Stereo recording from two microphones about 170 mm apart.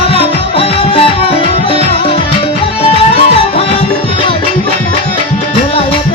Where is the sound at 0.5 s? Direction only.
35° left (ahead or behind).